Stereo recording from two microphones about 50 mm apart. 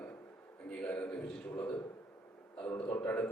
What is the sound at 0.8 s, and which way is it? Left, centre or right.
Speech, left.